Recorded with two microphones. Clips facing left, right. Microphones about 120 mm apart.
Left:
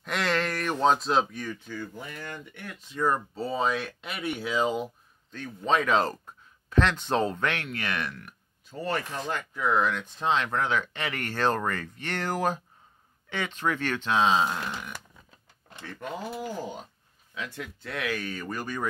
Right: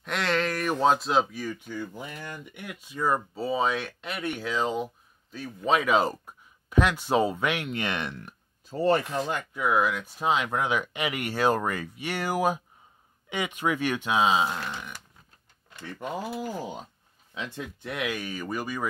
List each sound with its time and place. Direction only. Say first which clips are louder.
0.0 s speech: right 1 dB; centre (ahead or behind)
5.3 s speech: right 1 dB; 5° right (ahead or behind); by 9.0 s 30° right (ahead or behind)
9.3 s speech: left 1 dB; 15° right (ahead or behind)
15.9 s speech: right 2 dB; 15° right (ahead or behind)